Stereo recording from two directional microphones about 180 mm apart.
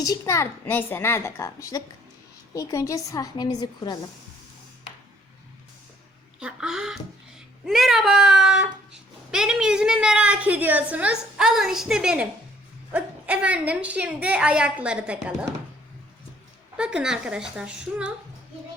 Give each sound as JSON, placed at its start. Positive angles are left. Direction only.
{"t": 0.0, "sound": "a woman's voice", "side_deg": 20}
{"t": 6.4, "sound": "a woman's voice", "side_deg": -5}
{"t": 16.7, "sound": "speech", "side_deg": -5}